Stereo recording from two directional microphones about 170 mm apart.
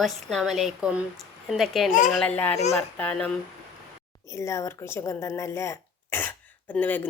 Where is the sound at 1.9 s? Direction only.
45° left (ahead or behind).